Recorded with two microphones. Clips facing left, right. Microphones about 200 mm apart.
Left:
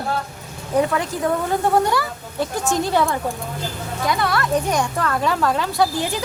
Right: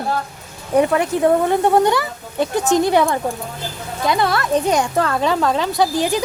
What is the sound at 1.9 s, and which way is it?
Speech, 20° right (ahead or behind).